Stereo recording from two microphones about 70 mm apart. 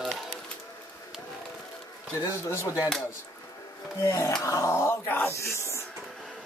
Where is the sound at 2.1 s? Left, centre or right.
Left.